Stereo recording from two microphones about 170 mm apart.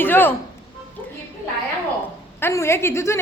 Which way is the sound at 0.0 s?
10° left (ahead or behind).